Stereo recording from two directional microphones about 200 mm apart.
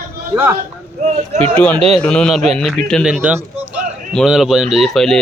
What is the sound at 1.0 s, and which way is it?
Speech, 30° right (ahead or behind).